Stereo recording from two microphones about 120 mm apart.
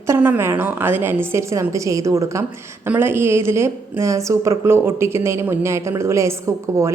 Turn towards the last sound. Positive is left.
turn(degrees=-25)  # may be behind; listen again after turning